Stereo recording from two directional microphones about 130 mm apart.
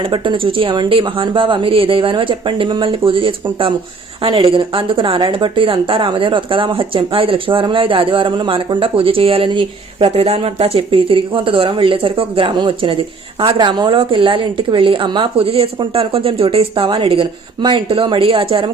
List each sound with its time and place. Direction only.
0.0 s a woman's voice: 40° right (ahead or behind)